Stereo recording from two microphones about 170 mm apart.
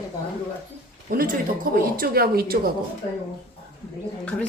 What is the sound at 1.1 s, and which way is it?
Speech, 55° right (ahead or behind).